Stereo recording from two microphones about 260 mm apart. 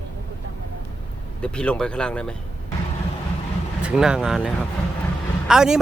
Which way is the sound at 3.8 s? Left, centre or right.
Centre.